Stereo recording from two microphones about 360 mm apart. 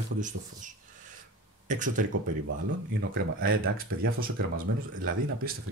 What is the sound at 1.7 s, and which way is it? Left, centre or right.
Speech, right.